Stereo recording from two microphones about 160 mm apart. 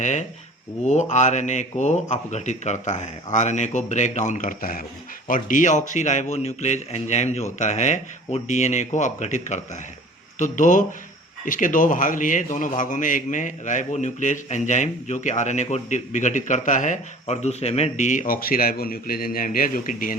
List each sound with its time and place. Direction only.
0.0 s a man's voice: 50° left (ahead or behind)